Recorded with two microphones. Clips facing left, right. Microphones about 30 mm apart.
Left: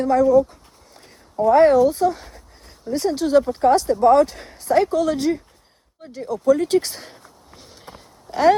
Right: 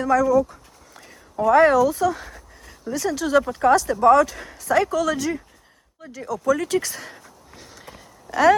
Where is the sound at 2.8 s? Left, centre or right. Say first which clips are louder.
Left 3 dB; right.